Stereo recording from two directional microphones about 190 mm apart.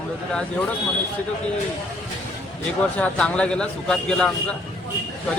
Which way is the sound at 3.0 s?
5° left (ahead or behind).